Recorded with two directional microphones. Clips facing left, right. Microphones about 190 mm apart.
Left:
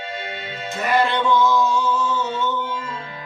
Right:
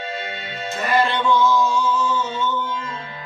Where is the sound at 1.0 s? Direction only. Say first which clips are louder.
Even; 20° left (ahead or behind).